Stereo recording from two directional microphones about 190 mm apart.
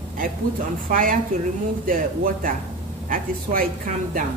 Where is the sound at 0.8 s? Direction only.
45° right (ahead or behind).